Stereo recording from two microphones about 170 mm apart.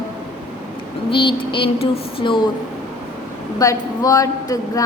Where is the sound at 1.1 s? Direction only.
30° left (ahead or behind).